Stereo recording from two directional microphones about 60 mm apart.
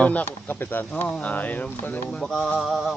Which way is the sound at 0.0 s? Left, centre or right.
Left.